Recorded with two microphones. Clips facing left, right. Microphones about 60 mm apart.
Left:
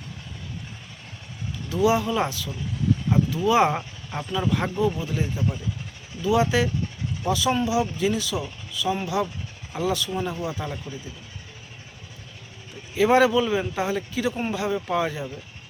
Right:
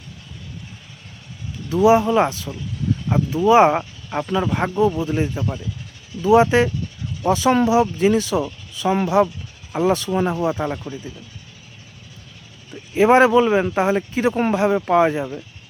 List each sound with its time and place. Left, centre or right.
1.7 s speech: right
13.0 s speech: right